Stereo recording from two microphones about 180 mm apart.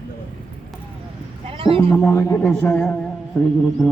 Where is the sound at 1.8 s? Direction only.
10° left (ahead or behind).